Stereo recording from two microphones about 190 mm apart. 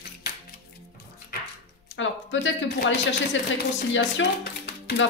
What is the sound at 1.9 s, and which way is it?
Speech, 80° left.